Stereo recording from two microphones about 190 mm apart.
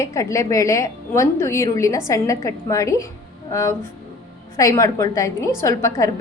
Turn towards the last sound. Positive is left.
turn(degrees=15)  # may be behind; listen again after turning